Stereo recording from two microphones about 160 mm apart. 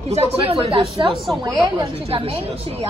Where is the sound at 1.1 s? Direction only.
Centre (ahead or behind).